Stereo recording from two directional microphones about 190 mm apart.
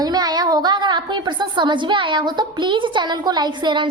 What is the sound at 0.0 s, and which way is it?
A woman's voice, 20° right (ahead or behind).